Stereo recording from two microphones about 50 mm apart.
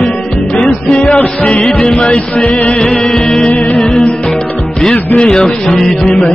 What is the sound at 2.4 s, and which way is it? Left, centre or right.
Music, centre.